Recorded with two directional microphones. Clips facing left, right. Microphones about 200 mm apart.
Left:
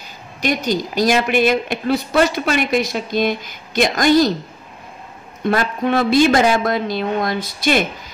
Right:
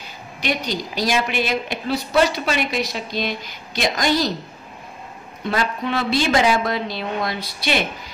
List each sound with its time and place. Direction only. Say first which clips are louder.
0.4 s speech: left 5 dB; 45° left (ahead or behind)
5.4 s speech: left 5 dB; 50° left (ahead or behind)